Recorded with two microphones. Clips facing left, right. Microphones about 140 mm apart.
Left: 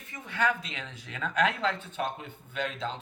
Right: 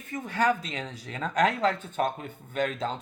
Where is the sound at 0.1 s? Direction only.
45° right (ahead or behind).